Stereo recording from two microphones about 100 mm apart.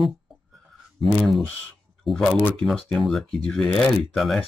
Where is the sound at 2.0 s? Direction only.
Centre (ahead or behind).